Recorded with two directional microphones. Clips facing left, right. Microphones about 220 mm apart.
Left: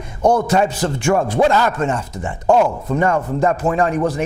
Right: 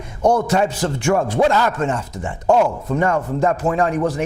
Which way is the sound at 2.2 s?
30° left (ahead or behind).